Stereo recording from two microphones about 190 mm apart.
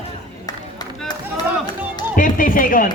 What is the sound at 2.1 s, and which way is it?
Speech, 45° left (ahead or behind).